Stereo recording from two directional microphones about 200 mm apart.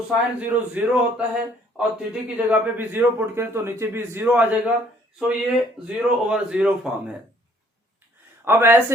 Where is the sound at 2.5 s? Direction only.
10° right (ahead or behind).